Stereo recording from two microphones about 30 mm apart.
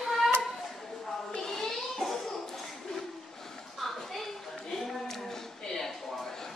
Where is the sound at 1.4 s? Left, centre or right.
Centre.